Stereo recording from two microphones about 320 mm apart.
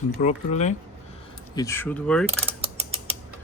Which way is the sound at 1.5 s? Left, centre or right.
Centre.